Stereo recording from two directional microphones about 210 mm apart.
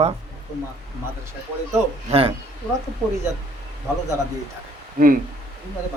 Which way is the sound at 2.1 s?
30° right (ahead or behind).